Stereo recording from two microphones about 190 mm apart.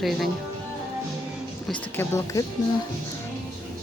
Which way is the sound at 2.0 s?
15° left (ahead or behind).